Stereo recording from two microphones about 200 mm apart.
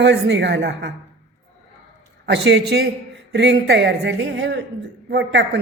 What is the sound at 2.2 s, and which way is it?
A woman's voice, 60° right (ahead or behind).